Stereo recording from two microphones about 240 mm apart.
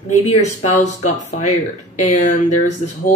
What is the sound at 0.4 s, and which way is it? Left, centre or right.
Speech, left.